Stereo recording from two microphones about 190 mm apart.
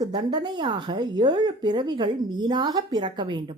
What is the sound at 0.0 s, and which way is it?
A woman's voice, 20° right (ahead or behind).